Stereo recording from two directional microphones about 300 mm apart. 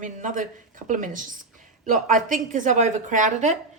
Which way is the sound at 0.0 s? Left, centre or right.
Right.